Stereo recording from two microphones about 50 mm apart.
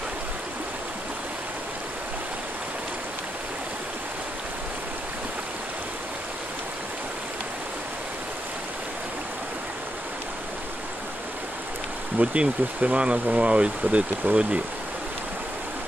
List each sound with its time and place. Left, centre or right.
12.2 s speech: right